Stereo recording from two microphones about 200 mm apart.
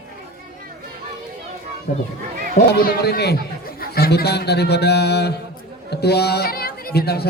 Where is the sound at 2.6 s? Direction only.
50° left (ahead or behind).